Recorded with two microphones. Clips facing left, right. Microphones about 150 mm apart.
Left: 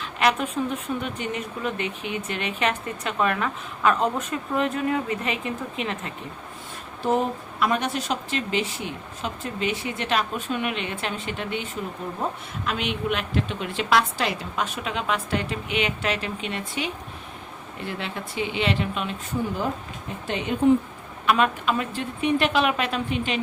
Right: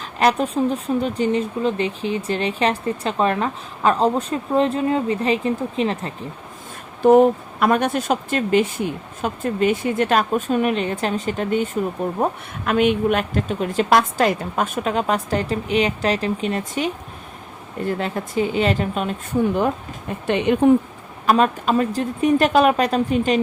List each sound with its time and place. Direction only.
0.0 s speech: 35° right (ahead or behind)
7.0 s speech: 60° right (ahead or behind)
19.5 s speech: 65° right (ahead or behind)
21.2 s speech: 40° right (ahead or behind)